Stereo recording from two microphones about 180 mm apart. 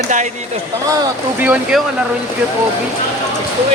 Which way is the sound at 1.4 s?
5° right (ahead or behind).